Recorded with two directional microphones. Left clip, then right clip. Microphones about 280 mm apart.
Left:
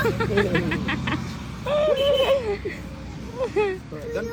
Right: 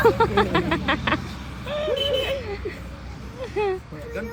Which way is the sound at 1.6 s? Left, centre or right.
Centre.